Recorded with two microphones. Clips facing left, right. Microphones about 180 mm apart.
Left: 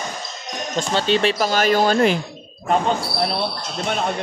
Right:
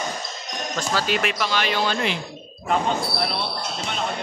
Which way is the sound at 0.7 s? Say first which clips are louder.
Left 5 dB; 25° left (ahead or behind).